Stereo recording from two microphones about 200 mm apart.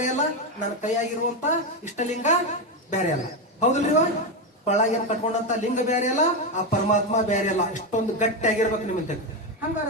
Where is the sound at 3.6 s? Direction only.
35° left (ahead or behind).